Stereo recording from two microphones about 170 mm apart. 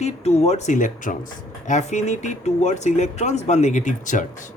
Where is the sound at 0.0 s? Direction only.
40° left (ahead or behind).